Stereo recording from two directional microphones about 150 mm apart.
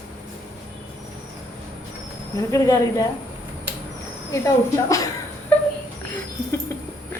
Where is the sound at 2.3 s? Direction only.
20° left (ahead or behind).